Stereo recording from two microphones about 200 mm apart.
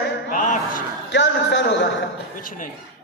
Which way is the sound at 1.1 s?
65° left (ahead or behind).